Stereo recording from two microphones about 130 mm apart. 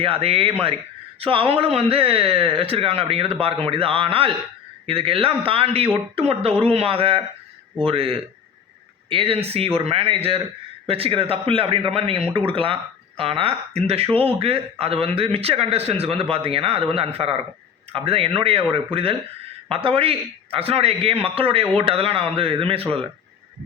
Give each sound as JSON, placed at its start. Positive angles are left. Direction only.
{"t": 0.0, "sound": "speech", "side_deg": -50}